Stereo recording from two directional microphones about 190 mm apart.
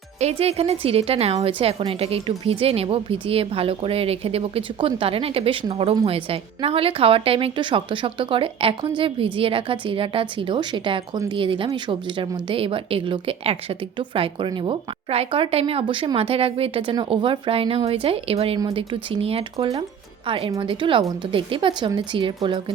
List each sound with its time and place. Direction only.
0.2 s a woman's voice: 35° right (ahead or behind)